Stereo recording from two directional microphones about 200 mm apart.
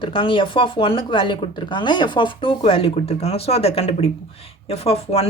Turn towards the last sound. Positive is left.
turn(degrees=30)  # may be behind; listen again after turning